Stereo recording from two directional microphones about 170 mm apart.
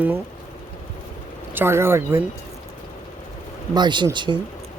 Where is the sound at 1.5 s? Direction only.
15° right (ahead or behind).